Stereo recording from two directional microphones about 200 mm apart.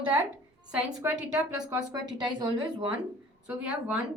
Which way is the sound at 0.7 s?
5° right (ahead or behind).